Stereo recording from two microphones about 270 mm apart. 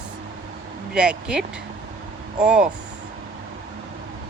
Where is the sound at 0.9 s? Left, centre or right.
Centre.